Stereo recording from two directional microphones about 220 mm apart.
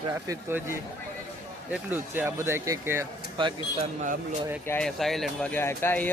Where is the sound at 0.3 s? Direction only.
10° right (ahead or behind).